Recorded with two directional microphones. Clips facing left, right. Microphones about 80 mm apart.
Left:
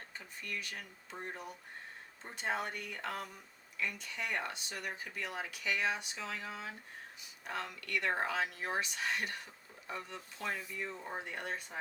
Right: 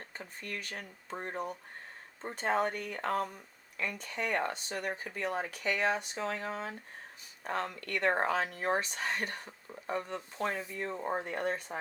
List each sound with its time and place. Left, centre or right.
0.2 s speech: right